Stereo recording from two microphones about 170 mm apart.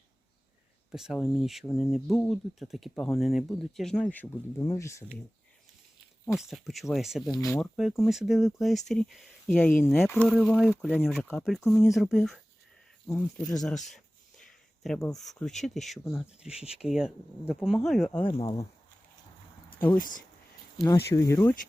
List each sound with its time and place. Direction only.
0.9 s speech: 5° right (ahead or behind); by 5.0 s 15° left (ahead or behind)
6.2 s speech: centre (ahead or behind)
7.3 s speech: 20° left (ahead or behind)
7.6 s speech: centre (ahead or behind)
10.2 s speech: centre (ahead or behind)
13.6 s a sound: 5° left (ahead or behind)
15.1 s speech: centre (ahead or behind)
18.3 s speech: 30° left (ahead or behind)
20.0 s speech: 55° left (ahead or behind)
21.1 s speech: 15° left (ahead or behind)